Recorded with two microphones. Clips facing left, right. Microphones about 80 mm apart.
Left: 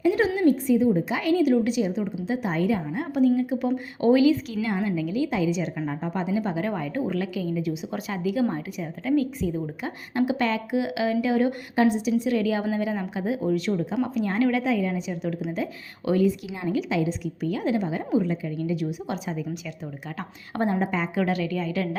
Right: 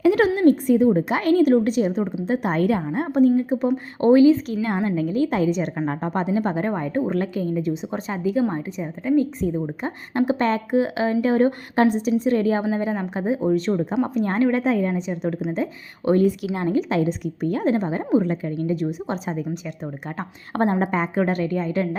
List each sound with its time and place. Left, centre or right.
0.0 s a sound: right
0.3 s a woman's voice: right
6.7 s a woman's voice: right
9.4 s a woman's voice: right
13.9 s a woman's voice: right
14.2 s a woman's voice: right
20.5 s a woman's voice: right